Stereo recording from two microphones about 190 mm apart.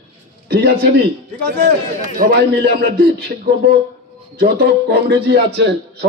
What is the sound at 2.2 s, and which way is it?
Speech, 55° right (ahead or behind).